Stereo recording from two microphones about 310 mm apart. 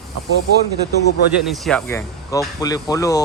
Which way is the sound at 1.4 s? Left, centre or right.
Centre.